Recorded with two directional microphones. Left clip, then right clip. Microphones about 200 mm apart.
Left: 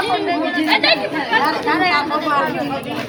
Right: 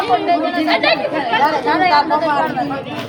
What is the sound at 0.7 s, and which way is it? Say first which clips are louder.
Speech: even; 10° right (ahead or behind).